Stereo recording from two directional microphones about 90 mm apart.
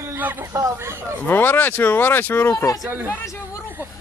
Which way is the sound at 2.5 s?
45° left (ahead or behind).